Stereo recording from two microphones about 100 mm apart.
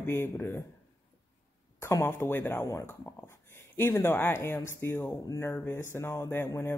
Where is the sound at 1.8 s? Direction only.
25° left (ahead or behind).